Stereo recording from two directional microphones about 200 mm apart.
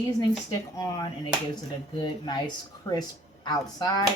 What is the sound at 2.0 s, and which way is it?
Speech, 20° left (ahead or behind).